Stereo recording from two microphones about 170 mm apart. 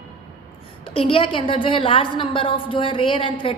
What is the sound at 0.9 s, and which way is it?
A woman's voice, 30° left (ahead or behind).